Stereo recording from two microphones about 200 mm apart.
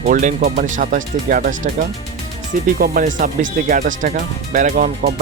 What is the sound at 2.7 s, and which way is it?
Speech, 45° right (ahead or behind).